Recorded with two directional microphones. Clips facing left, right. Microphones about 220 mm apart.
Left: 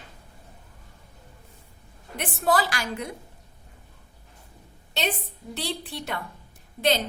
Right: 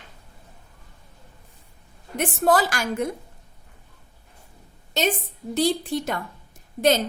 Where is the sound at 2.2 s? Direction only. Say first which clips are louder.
Right 4 dB; 45° right (ahead or behind).